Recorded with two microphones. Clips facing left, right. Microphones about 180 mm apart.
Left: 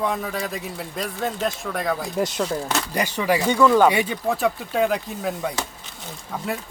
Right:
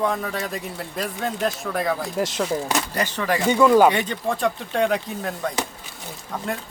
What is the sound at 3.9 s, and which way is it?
A man's voice, 10° left (ahead or behind).